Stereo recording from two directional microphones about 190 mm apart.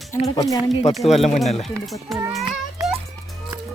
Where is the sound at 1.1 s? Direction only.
35° left (ahead or behind).